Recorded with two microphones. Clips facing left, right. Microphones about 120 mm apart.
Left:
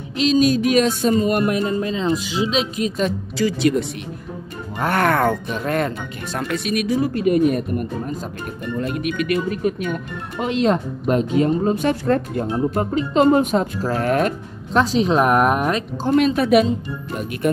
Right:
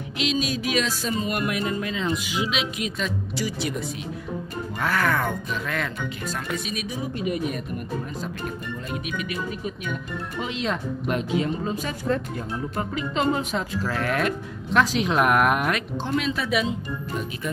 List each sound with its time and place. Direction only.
0.2 s speech: 40° left (ahead or behind)
4.8 s speech: 60° left (ahead or behind); by 5.9 s 45° left (ahead or behind)
6.3 s speech: 65° left (ahead or behind)
7.2 s speech: 50° left (ahead or behind)
8.7 s speech: 60° left (ahead or behind)
10.4 s speech: 45° left (ahead or behind)
11.7 s speech: 60° left (ahead or behind)
12.5 s speech: 35° left (ahead or behind)
13.8 s speech: 35° left (ahead or behind)
16.1 s speech: 50° left (ahead or behind)